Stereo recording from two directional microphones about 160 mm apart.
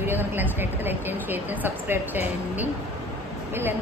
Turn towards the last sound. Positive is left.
turn(degrees=-15)  # may be behind; listen again after turning